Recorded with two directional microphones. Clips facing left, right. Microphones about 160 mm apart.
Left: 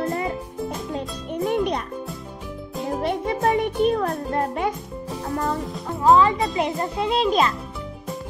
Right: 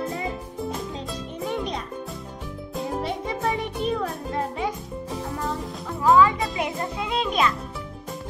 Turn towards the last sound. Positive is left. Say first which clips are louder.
# left 4 dB
turn(degrees=35)  # may be behind; listen again after turning